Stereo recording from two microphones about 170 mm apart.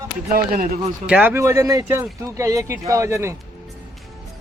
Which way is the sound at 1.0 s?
10° right (ahead or behind).